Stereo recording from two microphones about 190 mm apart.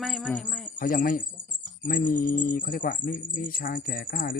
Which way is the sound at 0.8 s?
50° left (ahead or behind).